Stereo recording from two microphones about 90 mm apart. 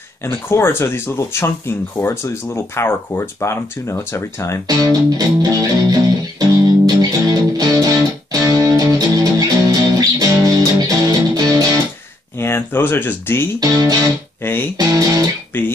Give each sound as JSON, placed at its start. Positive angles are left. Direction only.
{"t": 0.2, "sound": "speech", "side_deg": 25}
{"t": 5.1, "sound": "music", "side_deg": -45}
{"t": 12.4, "sound": "speech", "side_deg": 25}
{"t": 13.6, "sound": "music", "side_deg": -45}
{"t": 14.4, "sound": "speech", "side_deg": 25}
{"t": 14.8, "sound": "music", "side_deg": -45}
{"t": 15.5, "sound": "speech", "side_deg": 20}